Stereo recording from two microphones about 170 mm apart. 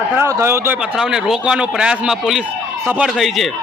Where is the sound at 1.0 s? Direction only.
5° right (ahead or behind).